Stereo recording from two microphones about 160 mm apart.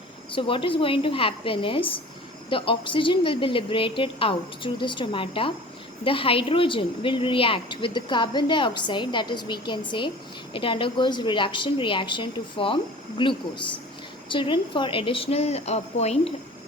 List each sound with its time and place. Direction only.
0.3 s a woman's voice: 30° left (ahead or behind)